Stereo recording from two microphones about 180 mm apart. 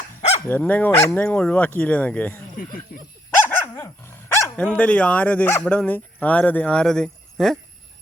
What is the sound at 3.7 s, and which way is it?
Speech, 15° left (ahead or behind).